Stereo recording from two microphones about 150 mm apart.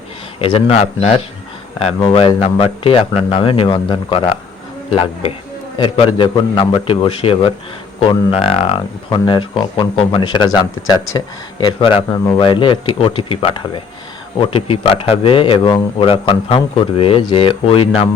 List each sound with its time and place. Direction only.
0.3 s speech: 40° left (ahead or behind)